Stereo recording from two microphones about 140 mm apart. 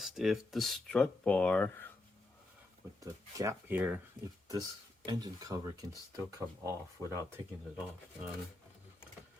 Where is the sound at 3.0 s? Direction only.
25° right (ahead or behind).